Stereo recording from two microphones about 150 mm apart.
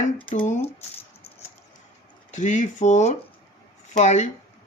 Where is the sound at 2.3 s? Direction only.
55° left (ahead or behind).